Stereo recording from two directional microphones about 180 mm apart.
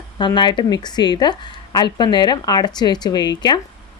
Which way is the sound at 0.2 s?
25° left (ahead or behind).